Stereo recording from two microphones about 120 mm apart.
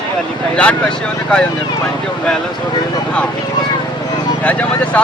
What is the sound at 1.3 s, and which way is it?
Speech, 10° left (ahead or behind).